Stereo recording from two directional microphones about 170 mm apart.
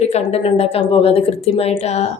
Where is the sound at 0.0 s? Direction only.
40° left (ahead or behind).